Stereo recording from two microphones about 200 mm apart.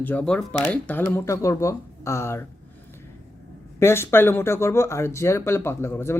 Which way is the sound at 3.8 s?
10° left (ahead or behind).